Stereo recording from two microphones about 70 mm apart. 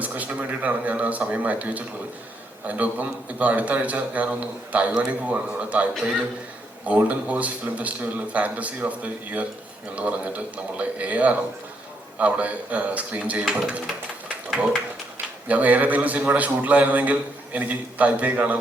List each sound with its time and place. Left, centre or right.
0.0 s a man's voice: right
15.4 s a man's voice: right